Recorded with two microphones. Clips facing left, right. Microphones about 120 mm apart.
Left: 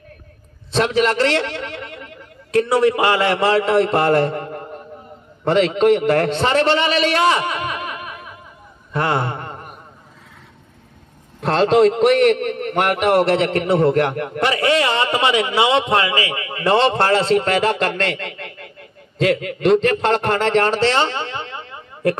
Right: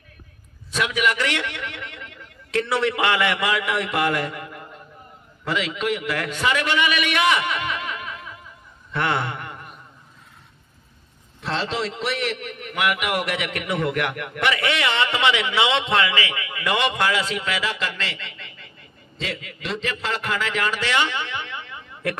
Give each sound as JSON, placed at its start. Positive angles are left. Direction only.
{"t": 0.7, "sound": "a man's voice", "side_deg": 40}
{"t": 1.4, "sound": "a man's voice", "side_deg": 25}
{"t": 7.2, "sound": "snicker", "side_deg": 25}
{"t": 8.9, "sound": "a sound", "side_deg": 25}
{"t": 11.5, "sound": "a man's voice", "side_deg": 50}